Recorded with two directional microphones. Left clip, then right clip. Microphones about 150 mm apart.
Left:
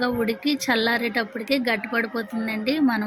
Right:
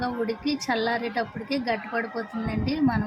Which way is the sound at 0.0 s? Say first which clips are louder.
Left 4 dB; 15° left (ahead or behind).